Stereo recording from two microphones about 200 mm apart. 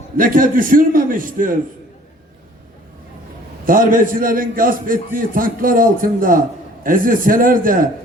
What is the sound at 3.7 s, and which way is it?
A man's voice, 45° right (ahead or behind).